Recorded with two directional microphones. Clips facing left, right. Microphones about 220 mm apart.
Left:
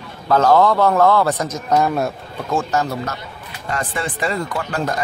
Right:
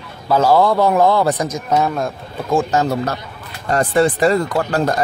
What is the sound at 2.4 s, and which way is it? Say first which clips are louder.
Speech: right 3 dB; 15° right (ahead or behind).